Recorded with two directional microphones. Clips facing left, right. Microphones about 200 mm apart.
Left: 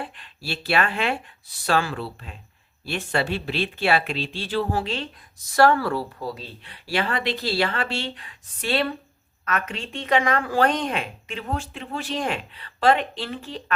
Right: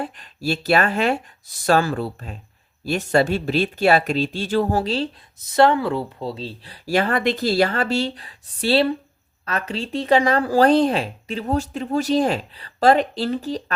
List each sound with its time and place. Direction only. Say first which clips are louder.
0.0 s speech: right 9 dB; 40° right (ahead or behind)
5.5 s speech: right 2 dB; 20° right (ahead or behind)
6.8 s speech: right 6 dB; 45° right (ahead or behind)